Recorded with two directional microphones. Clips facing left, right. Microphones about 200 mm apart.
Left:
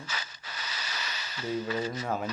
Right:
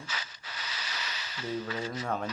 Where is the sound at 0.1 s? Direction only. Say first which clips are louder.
Left 1 dB; 45° left (ahead or behind).